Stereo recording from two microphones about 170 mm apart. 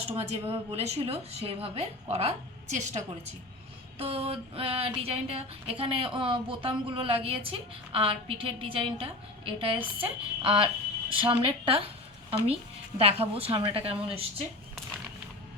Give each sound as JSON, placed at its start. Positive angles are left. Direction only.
{"t": 0.2, "sound": "a woman's voice", "side_deg": -35}
{"t": 13.0, "sound": "a woman's voice", "side_deg": -35}